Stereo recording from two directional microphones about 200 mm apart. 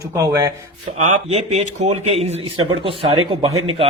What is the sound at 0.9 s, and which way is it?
A man's voice, 35° right (ahead or behind).